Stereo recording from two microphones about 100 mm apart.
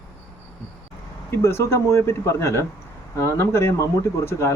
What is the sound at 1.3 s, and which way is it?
Speech, 25° left (ahead or behind).